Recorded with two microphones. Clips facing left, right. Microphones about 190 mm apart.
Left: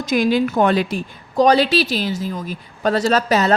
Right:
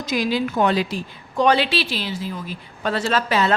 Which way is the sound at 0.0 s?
50° left (ahead or behind).